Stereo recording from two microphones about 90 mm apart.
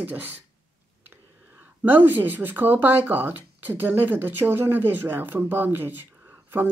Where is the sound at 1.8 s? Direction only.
20° right (ahead or behind).